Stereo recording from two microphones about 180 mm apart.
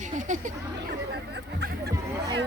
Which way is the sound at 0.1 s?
45° right (ahead or behind).